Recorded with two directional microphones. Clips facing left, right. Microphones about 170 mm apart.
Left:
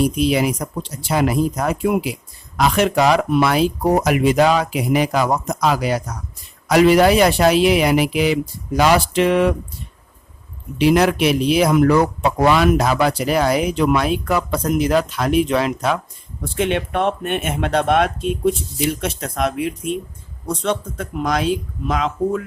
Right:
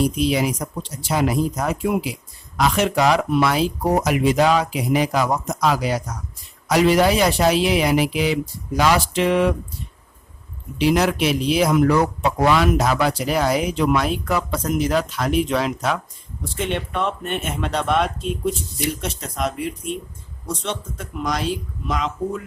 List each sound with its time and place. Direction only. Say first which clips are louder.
0.0 s speech: left 2 dB; 60° left (ahead or behind)
10.8 s speech: left 3 dB; 60° left (ahead or behind)